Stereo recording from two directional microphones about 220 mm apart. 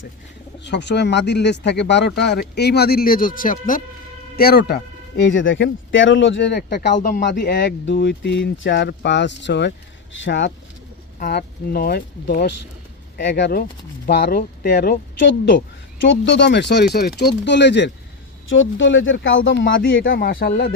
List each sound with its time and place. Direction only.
0.6 s speech: 50° left (ahead or behind)